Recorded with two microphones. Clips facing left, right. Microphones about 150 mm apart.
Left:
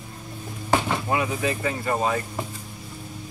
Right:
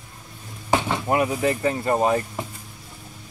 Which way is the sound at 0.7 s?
15° right (ahead or behind).